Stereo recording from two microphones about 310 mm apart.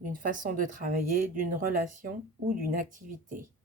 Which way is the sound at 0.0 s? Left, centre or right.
Right.